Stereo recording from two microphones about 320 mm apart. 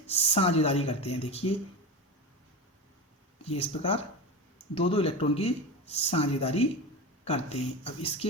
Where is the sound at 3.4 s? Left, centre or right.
Centre.